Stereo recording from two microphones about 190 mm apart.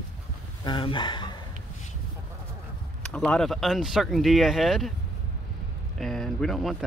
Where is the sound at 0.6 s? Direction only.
25° left (ahead or behind).